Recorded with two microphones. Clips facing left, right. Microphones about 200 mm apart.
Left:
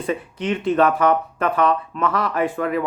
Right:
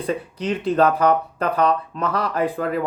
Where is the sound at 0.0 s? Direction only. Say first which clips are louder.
Even; 35° right (ahead or behind).